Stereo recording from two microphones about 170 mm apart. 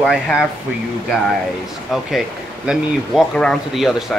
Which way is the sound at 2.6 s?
Centre (ahead or behind).